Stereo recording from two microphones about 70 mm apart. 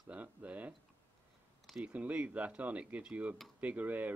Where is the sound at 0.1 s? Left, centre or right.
Centre.